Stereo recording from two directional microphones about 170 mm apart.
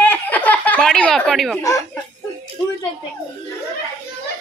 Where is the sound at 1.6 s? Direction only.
20° left (ahead or behind).